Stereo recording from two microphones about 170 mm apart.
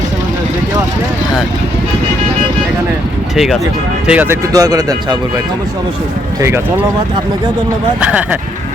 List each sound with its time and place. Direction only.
3.3 s speech: centre (ahead or behind)
4.5 s speech: 20° right (ahead or behind)
8.0 s speech: 10° right (ahead or behind)